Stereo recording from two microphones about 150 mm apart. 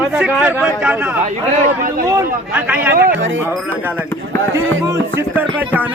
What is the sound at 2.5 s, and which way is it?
Speech, 10° right (ahead or behind).